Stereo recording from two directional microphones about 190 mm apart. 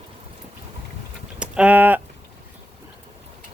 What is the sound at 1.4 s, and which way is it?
Speech, 5° right (ahead or behind).